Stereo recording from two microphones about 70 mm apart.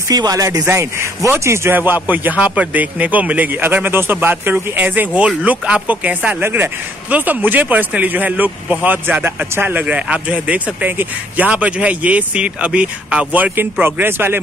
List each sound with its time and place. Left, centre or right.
0.1 s speech: right
0.7 s speech: right
2.0 s speech: right
6.4 s speech: right